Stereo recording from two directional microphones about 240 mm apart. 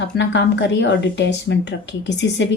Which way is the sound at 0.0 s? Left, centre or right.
Left.